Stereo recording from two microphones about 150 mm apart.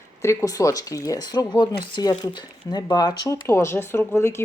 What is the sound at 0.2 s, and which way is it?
Speech, 20° left (ahead or behind).